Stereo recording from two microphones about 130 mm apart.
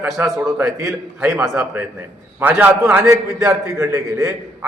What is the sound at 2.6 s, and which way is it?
A man's voice, 20° right (ahead or behind).